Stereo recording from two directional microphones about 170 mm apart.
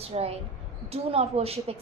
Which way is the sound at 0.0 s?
35° right (ahead or behind).